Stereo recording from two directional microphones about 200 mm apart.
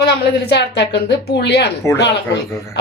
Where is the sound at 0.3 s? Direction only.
55° left (ahead or behind).